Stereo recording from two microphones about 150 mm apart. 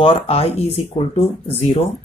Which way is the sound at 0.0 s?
35° left (ahead or behind).